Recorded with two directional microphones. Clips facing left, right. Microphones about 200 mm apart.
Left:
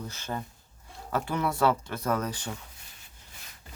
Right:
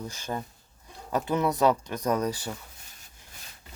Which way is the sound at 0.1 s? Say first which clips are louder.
Right 2 dB; 15° right (ahead or behind).